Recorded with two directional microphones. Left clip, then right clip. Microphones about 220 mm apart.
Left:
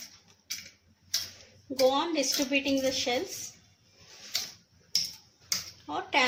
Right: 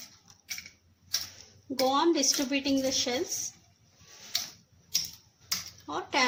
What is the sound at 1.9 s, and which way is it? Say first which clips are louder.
A woman's voice: right 3 dB; 55° right (ahead or behind).